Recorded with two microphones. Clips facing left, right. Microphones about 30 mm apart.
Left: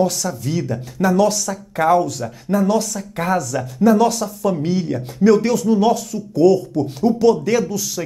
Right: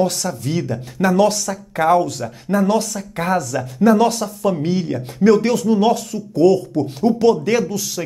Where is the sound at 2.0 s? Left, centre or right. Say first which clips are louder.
Even; right; by 3.4 s centre.